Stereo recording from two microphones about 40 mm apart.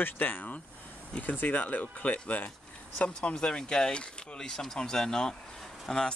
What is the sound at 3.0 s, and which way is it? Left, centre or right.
Speech, left.